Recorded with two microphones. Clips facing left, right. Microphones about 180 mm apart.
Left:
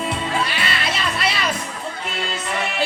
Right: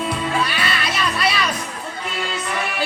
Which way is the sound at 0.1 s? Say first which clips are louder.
Right 1 dB; 25° left (ahead or behind).